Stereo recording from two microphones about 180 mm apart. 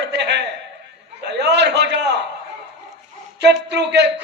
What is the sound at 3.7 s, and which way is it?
Speech, 75° right (ahead or behind).